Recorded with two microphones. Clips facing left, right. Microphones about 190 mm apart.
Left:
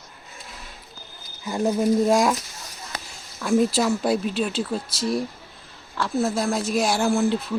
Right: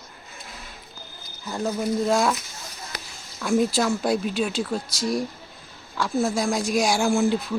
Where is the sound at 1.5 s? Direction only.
15° left (ahead or behind).